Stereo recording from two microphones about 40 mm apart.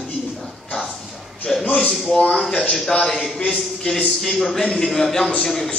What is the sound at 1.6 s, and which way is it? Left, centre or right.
Speech, left.